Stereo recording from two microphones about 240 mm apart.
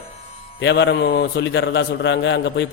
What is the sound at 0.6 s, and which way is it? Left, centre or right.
Mantra, left.